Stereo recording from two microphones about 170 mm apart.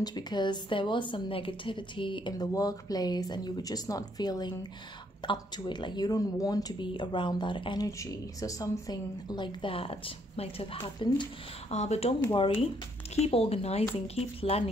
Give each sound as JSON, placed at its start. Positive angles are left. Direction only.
{"t": 0.0, "sound": "speech", "side_deg": 25}
{"t": 11.7, "sound": "speech", "side_deg": 40}
{"t": 12.2, "sound": "speech", "side_deg": 25}